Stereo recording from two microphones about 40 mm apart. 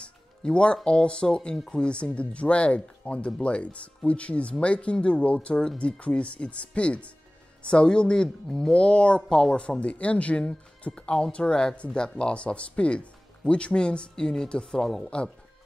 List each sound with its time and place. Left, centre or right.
0.0 s music: left
0.8 s speech: left
8.5 s speech: centre
8.7 s speech: left
14.8 s speech: centre